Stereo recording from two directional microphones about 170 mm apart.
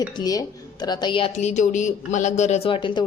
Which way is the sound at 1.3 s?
45° left (ahead or behind).